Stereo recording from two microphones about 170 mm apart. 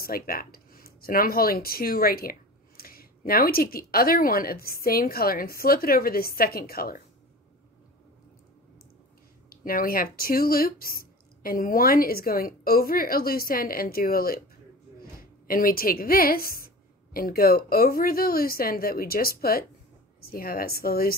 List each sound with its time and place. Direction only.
0.0 s speech: 60° left (ahead or behind)
9.5 s a woman's voice: 60° left (ahead or behind)